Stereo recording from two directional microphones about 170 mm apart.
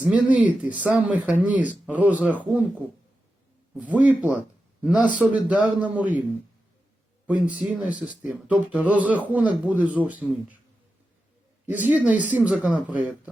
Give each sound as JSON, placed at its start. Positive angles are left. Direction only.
{"t": 0.0, "sound": "speech", "side_deg": -10}
{"t": 7.3, "sound": "speech", "side_deg": -10}
{"t": 11.6, "sound": "speech", "side_deg": -10}